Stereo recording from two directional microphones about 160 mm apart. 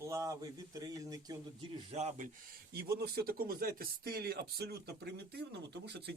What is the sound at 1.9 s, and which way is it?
Speech, 45° right (ahead or behind).